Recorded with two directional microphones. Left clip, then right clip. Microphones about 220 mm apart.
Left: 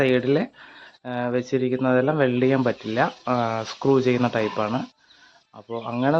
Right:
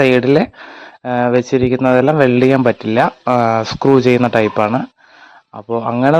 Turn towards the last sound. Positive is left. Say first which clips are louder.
# right 10 dB
turn(degrees=-40)  # may be behind; listen again after turning